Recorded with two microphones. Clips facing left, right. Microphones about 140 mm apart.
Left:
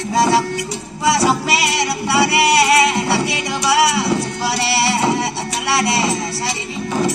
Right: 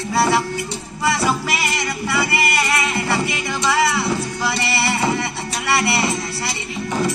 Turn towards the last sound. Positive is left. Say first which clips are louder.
# left 3 dB
turn(degrees=90)